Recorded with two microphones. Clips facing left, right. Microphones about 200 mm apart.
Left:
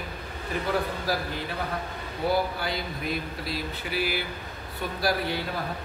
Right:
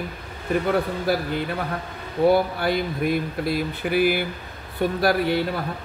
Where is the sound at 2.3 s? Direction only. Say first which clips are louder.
Right 3 dB; 55° right (ahead or behind).